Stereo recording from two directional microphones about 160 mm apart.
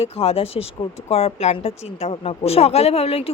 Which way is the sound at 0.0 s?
35° left (ahead or behind).